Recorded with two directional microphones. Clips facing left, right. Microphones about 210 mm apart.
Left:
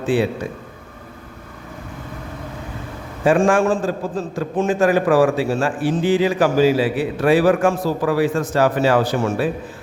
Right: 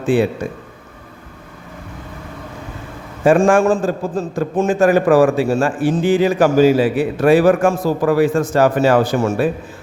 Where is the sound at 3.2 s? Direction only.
45° right (ahead or behind).